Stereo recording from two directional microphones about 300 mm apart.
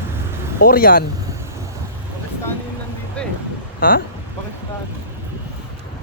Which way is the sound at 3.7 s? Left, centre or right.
Left.